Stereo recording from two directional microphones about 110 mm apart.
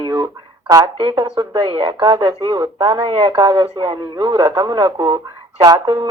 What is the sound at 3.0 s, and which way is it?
Speech, 50° right (ahead or behind).